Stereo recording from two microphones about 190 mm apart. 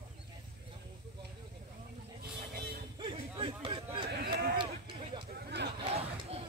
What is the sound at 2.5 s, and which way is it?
Vehicle, 50° right (ahead or behind).